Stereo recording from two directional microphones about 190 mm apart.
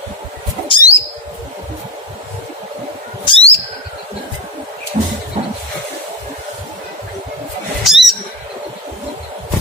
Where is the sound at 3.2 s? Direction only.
30° left (ahead or behind).